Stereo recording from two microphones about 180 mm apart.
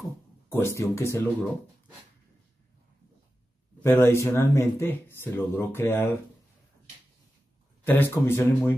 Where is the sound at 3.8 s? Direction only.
15° left (ahead or behind).